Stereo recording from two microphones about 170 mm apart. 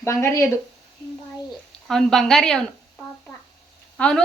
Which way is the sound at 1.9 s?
Centre (ahead or behind).